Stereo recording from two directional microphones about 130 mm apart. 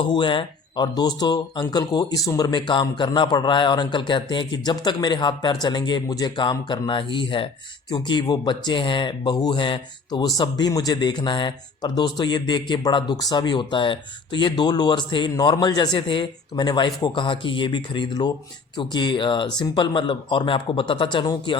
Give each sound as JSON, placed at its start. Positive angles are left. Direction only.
{"t": 0.0, "sound": "speech", "side_deg": 40}